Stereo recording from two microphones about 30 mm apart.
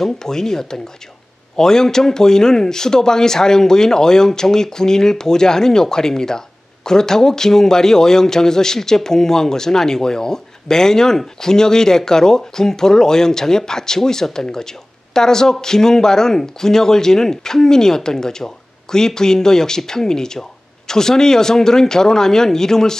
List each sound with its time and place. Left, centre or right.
0.0 s a man's voice: centre